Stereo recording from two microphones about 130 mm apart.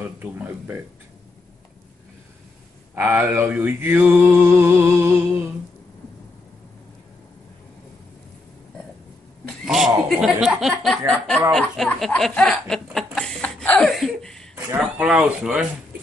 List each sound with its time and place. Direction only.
0.2 s mantra: 15° right (ahead or behind)
2.9 s mantra: 15° right (ahead or behind)
9.5 s a sound: centre (ahead or behind)
11.1 s speech: 5° left (ahead or behind)
12.9 s a sound: 5° left (ahead or behind)
14.7 s mantra: 10° right (ahead or behind)